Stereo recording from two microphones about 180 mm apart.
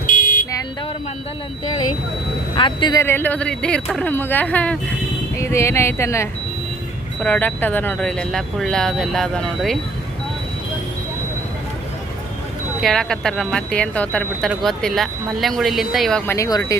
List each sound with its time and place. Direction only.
0.1 s car alarm: 50° left (ahead or behind)
2.6 s speech: 25° left (ahead or behind)
3.0 s speech: 10° left (ahead or behind)
12.8 s speech: 5° left (ahead or behind)
16.2 s speech: 15° left (ahead or behind)